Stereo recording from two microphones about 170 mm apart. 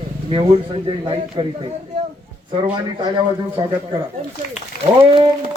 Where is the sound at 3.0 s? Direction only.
25° right (ahead or behind).